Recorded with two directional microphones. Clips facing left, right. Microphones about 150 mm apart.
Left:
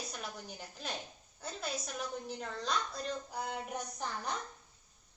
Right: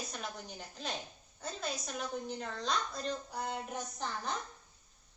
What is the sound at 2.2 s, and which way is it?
A woman's voice, 5° left (ahead or behind).